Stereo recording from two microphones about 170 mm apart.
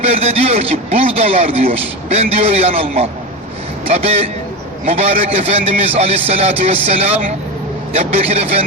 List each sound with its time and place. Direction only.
0.1 s speech: 35° right (ahead or behind)